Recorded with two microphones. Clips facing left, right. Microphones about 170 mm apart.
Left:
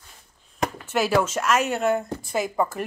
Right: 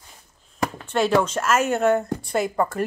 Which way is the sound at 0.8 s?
5° left (ahead or behind).